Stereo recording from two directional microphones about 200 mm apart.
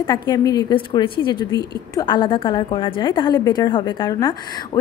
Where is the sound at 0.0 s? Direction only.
20° left (ahead or behind).